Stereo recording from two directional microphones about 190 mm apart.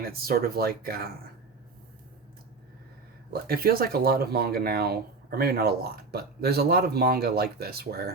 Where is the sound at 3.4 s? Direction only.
50° right (ahead or behind).